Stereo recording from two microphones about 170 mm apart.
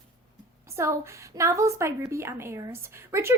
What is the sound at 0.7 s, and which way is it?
A woman's voice, 15° right (ahead or behind).